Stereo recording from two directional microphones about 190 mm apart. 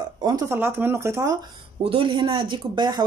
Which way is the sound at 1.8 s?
30° right (ahead or behind).